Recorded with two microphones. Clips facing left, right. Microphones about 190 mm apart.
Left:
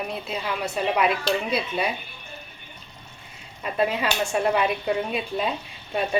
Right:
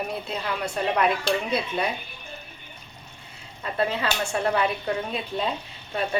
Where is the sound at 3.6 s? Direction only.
15° left (ahead or behind).